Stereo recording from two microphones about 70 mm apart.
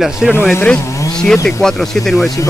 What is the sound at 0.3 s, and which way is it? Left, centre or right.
Speech, left.